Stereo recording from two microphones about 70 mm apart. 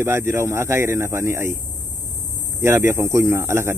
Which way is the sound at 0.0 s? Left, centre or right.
Right.